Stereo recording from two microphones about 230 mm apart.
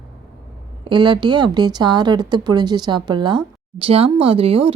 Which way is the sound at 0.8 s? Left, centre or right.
Right.